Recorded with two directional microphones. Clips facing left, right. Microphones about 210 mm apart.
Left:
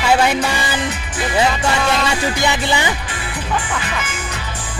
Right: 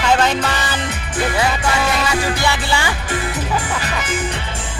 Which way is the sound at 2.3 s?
15° left (ahead or behind).